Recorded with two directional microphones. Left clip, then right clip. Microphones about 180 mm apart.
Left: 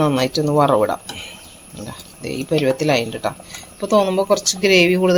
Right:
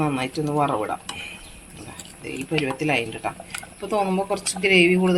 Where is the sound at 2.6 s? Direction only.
35° left (ahead or behind).